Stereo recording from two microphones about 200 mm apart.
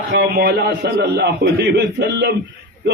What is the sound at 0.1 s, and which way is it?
A man's voice, 55° right (ahead or behind).